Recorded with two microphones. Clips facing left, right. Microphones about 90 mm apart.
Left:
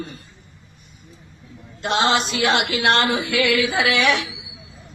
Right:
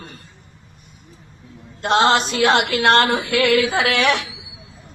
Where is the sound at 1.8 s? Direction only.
45° right (ahead or behind).